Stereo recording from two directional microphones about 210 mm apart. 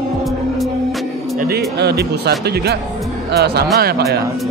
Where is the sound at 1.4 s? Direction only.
45° right (ahead or behind).